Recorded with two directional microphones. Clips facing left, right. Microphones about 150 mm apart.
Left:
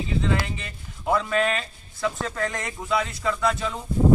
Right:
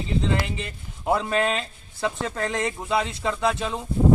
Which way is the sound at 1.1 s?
25° right (ahead or behind).